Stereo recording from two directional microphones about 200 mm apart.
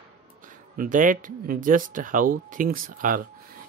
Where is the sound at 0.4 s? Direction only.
40° right (ahead or behind).